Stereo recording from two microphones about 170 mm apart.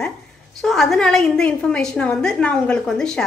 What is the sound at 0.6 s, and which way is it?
A woman's voice, centre (ahead or behind).